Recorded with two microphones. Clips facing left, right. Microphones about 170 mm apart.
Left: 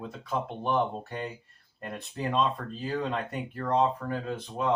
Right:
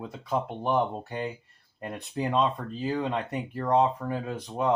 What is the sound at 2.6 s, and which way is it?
Speech, 15° right (ahead or behind).